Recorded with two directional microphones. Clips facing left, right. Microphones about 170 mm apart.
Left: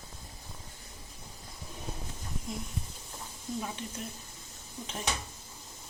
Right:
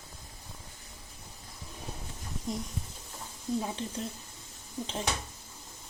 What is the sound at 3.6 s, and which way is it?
Speech, 30° right (ahead or behind).